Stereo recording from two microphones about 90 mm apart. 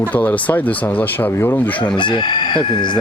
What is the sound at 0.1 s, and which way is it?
Speech, 15° left (ahead or behind).